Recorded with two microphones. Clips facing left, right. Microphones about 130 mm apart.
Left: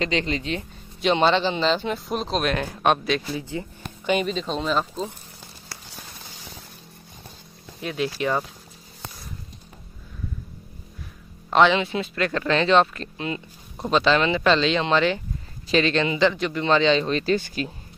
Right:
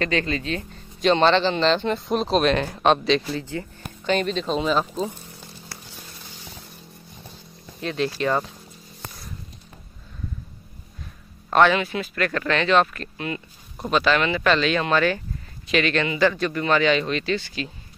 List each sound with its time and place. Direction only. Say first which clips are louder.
0.0 s speech: right 1 dB; 20° left (ahead or behind); by 5.1 s centre (ahead or behind)
7.8 s speech: right 1 dB; 10° left (ahead or behind)
11.5 s a man's voice: even; 20° left (ahead or behind); by 17.6 s 45° left (ahead or behind)